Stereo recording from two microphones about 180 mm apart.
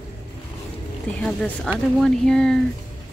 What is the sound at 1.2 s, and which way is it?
Speech, 5° left (ahead or behind).